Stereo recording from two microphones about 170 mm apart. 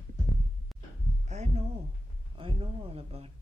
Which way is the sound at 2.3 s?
30° right (ahead or behind).